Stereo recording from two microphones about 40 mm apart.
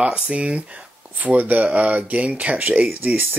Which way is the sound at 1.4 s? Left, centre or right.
Right.